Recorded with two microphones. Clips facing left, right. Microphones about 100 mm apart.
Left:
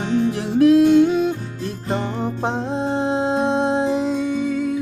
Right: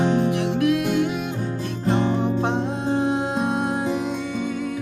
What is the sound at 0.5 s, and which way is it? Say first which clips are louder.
Music: left 12 dB; 30° left (ahead or behind).